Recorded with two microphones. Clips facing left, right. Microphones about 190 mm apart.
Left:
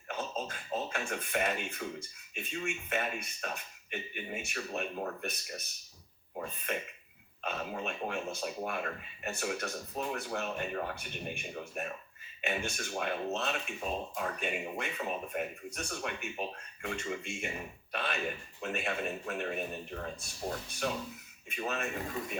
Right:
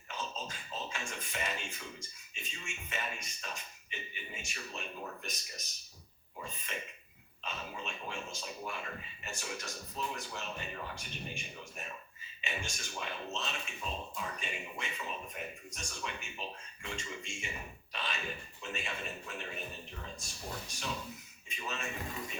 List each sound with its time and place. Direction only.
0.1 s speech: 60° left (ahead or behind)
6.3 s throat clearing: 60° left (ahead or behind)
7.4 s speech: 60° left (ahead or behind)